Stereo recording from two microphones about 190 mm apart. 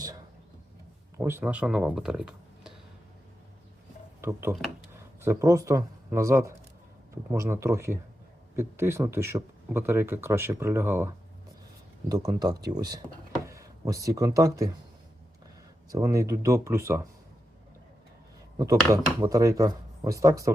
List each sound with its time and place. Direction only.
1.2 s speech: 10° right (ahead or behind)
4.2 s speech: 15° right (ahead or behind)
15.9 s speech: 15° right (ahead or behind)
18.6 s speech: 15° right (ahead or behind)